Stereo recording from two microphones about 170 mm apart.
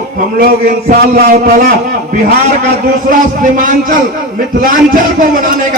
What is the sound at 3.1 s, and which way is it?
Speech, 50° right (ahead or behind).